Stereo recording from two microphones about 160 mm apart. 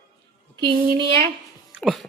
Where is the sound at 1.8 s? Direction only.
Centre (ahead or behind).